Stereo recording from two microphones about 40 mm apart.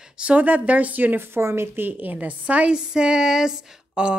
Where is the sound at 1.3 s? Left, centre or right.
Right.